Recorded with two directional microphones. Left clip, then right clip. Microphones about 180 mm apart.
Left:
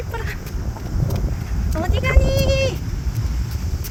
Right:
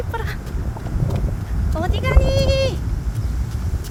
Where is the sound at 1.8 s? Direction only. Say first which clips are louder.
Even; 10° right (ahead or behind).